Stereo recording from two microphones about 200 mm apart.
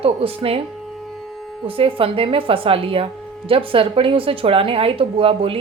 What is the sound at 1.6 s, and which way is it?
Speech, 25° right (ahead or behind).